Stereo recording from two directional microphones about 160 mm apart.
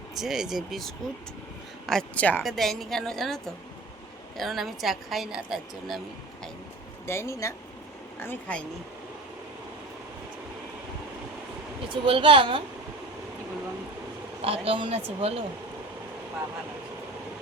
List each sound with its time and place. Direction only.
0.2 s a woman's voice: centre (ahead or behind)
7.1 s speech: 15° left (ahead or behind)
12.0 s speech: 35° right (ahead or behind)
14.4 s speech: 35° right (ahead or behind)